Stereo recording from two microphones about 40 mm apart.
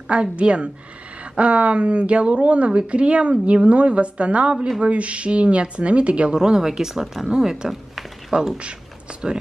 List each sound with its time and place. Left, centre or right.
0.1 s a woman's voice: right
6.3 s a woman's voice: centre